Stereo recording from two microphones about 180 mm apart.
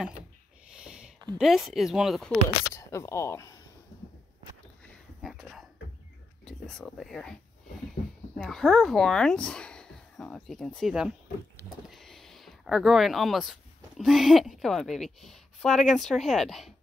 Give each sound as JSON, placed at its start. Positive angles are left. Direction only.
{"t": 0.7, "sound": "a sound", "side_deg": -5}
{"t": 1.4, "sound": "speech", "side_deg": 0}
{"t": 2.7, "sound": "speech", "side_deg": 15}
{"t": 5.2, "sound": "a sound", "side_deg": 0}
{"t": 6.4, "sound": "speech", "side_deg": 5}
{"t": 8.4, "sound": "speech", "side_deg": 0}